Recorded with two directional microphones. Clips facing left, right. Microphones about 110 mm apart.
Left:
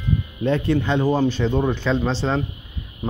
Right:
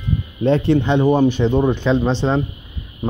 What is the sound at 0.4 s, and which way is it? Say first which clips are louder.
Speech: right 5 dB; 30° right (ahead or behind).